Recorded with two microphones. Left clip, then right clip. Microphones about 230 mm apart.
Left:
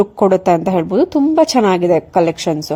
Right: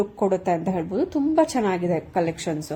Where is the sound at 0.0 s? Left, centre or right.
Left.